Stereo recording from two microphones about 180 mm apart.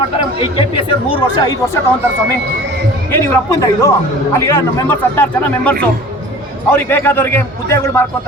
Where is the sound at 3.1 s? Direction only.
15° left (ahead or behind).